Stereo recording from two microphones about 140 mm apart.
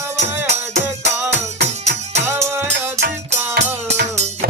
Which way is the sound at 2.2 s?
20° right (ahead or behind).